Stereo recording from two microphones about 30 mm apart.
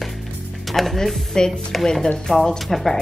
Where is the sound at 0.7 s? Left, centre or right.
Centre.